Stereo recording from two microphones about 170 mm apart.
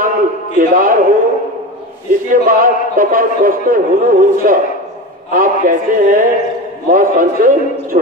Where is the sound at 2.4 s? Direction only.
55° right (ahead or behind).